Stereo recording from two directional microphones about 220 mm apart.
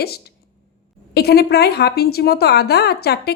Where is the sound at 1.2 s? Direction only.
45° left (ahead or behind).